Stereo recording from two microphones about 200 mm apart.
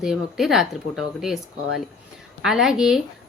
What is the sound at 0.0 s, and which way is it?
A woman's voice, centre (ahead or behind).